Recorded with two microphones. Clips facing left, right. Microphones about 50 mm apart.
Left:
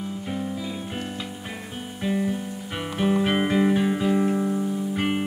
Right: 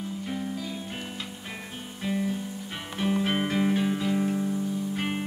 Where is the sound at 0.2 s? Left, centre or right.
Centre.